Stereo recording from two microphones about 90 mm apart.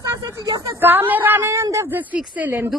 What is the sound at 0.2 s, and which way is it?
Speech, 40° right (ahead or behind).